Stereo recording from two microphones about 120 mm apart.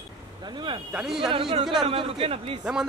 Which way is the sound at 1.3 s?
45° right (ahead or behind).